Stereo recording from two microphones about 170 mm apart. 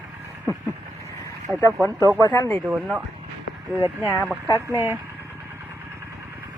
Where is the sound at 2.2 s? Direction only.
20° left (ahead or behind).